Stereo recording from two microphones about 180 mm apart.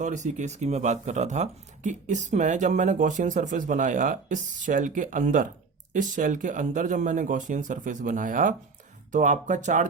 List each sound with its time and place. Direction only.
0.0 s speech: 40° right (ahead or behind)